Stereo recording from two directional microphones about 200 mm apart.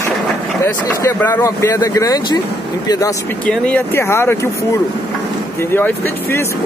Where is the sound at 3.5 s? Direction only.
5° left (ahead or behind).